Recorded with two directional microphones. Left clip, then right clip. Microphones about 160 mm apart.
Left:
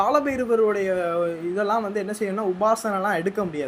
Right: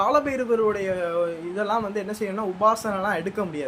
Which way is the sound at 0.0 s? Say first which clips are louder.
Even; 15° left (ahead or behind).